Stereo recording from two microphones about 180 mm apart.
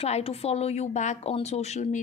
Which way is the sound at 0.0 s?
35° left (ahead or behind).